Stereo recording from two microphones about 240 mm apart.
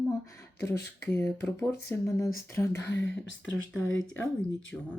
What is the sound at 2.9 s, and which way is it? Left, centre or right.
Speech, left.